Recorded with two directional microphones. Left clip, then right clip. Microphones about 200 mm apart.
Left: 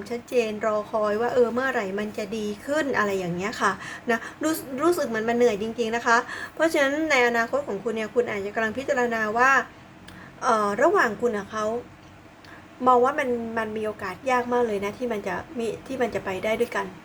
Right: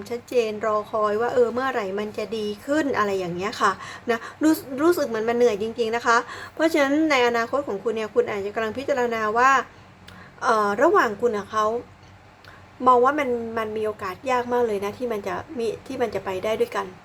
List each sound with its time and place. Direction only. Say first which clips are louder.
0.0 s a woman's voice: right 1 dB; 10° right (ahead or behind)
12.8 s a woman's voice: right 2 dB; 15° right (ahead or behind)